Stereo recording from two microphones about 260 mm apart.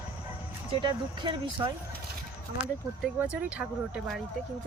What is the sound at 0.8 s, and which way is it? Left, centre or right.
Speech, centre.